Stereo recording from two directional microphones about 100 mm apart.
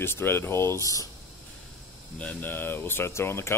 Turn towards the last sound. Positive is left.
turn(degrees=25)  # may be behind; listen again after turning